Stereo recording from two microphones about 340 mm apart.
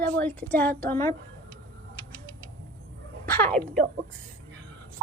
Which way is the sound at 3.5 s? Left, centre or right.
Centre.